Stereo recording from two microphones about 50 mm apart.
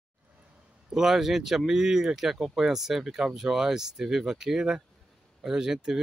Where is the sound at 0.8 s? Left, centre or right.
Centre.